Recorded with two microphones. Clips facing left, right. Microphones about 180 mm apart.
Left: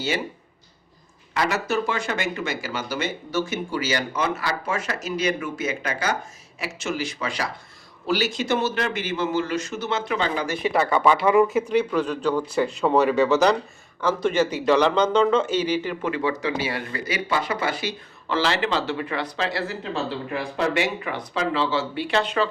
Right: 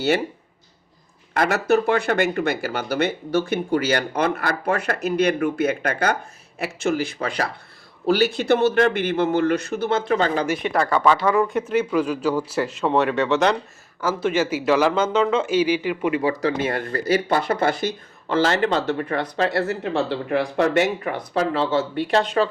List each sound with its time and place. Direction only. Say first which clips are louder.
1.3 s speech: right 5 dB; 50° right (ahead or behind)
10.1 s speech: right 4 dB; 45° right (ahead or behind)
10.5 s speech: right 1 dB; 5° left (ahead or behind)
11.4 s speech: even; centre (ahead or behind)
16.2 s speech: right 3 dB; 40° right (ahead or behind)
16.6 s speech: right 6 dB; 50° right (ahead or behind)